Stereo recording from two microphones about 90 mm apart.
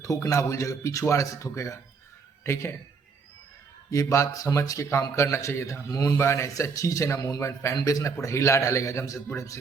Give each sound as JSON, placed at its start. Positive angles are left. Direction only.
{"t": 0.0, "sound": "a man's voice", "side_deg": 35}
{"t": 3.9, "sound": "speech", "side_deg": 35}